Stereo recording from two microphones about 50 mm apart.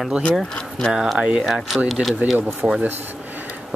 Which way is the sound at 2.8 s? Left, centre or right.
Right.